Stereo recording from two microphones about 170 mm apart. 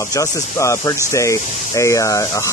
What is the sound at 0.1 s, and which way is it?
Speech, 20° left (ahead or behind).